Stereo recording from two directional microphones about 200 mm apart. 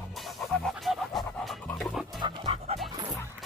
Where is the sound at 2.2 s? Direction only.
25° right (ahead or behind).